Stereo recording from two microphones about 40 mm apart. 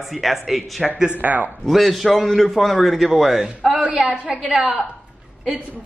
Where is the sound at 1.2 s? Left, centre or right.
Right.